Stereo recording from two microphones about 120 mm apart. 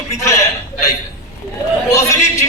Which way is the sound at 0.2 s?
25° left (ahead or behind).